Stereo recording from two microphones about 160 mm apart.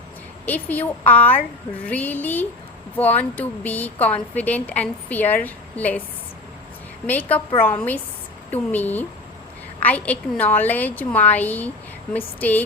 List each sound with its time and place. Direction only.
0.4 s a woman's voice: 10° left (ahead or behind)
7.1 s a woman's voice: 10° left (ahead or behind)
8.4 s a woman's voice: 10° left (ahead or behind)